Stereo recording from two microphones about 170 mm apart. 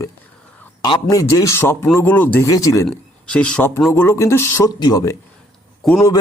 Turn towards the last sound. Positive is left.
turn(degrees=0)  # may be behind; listen again after turning